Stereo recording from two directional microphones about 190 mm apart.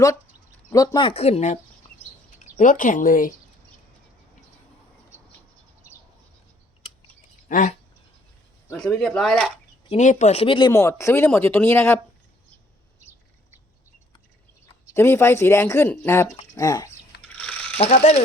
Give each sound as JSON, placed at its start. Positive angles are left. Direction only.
{"t": 0.7, "sound": "speech", "side_deg": 20}
{"t": 2.6, "sound": "speech", "side_deg": 45}
{"t": 7.4, "sound": "speech", "side_deg": 40}
{"t": 8.8, "sound": "speech", "side_deg": 0}
{"t": 9.9, "sound": "speech", "side_deg": 40}
{"t": 10.7, "sound": "speech", "side_deg": 15}
{"t": 14.9, "sound": "speech", "side_deg": 15}
{"t": 17.2, "sound": "pulleys", "side_deg": 5}
{"t": 17.7, "sound": "speech", "side_deg": 30}